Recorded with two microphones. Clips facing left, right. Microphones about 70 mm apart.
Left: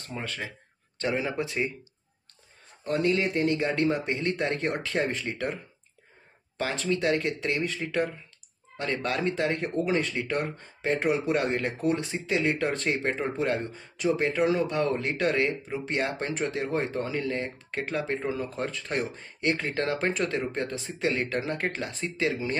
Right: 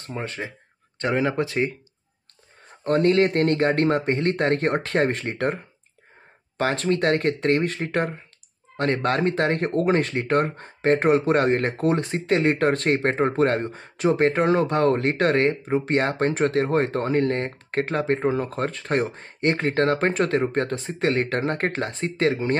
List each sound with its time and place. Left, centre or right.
0.1 s speech: right
1.0 s speech: right
2.8 s speech: right
6.6 s speech: right